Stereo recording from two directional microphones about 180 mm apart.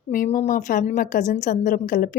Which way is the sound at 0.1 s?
45° left (ahead or behind).